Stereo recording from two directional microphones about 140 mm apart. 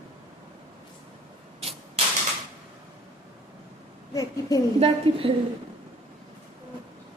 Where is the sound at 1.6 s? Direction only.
45° right (ahead or behind).